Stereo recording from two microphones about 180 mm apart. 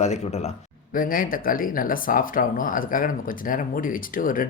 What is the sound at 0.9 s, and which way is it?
Speech, 50° left (ahead or behind).